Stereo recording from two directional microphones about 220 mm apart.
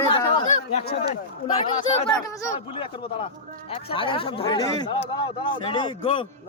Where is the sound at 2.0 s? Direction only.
15° left (ahead or behind).